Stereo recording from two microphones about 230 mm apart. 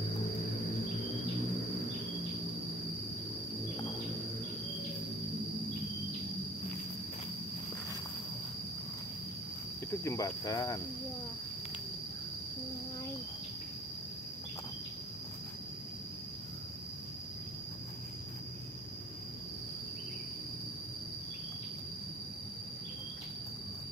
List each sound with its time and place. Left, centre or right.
10.0 s cricket: centre